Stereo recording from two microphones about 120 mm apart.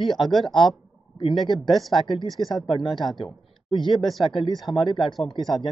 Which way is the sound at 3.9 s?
Centre (ahead or behind).